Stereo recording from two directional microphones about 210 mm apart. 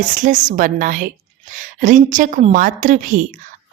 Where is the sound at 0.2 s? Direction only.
35° right (ahead or behind).